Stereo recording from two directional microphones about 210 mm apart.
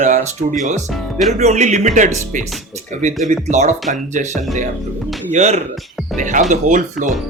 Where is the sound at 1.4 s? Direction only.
30° right (ahead or behind).